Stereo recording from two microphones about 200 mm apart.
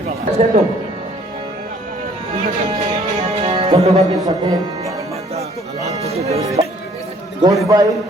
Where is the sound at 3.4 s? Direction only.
25° right (ahead or behind).